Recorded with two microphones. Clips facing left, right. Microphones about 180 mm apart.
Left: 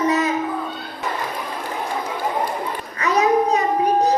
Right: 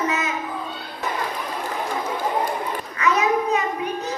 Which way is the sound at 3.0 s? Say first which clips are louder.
Left 3 dB; 35° left (ahead or behind).